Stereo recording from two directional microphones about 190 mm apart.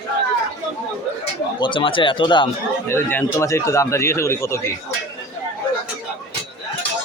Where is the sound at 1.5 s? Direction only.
25° left (ahead or behind).